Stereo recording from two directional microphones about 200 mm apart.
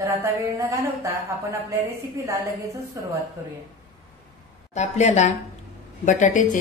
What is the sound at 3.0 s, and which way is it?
Speech, 15° right (ahead or behind).